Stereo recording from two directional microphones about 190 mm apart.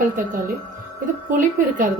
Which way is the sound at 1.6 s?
45° right (ahead or behind).